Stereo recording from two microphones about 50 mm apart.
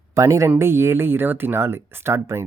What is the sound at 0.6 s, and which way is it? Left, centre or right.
Speech, right.